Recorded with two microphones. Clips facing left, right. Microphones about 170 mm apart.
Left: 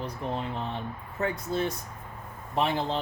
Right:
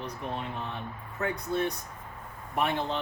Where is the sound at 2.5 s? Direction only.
25° left (ahead or behind).